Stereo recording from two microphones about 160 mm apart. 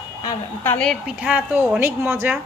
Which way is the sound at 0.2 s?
20° left (ahead or behind).